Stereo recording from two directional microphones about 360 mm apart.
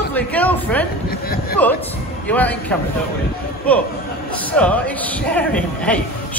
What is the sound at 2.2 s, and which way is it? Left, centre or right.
Speech, centre.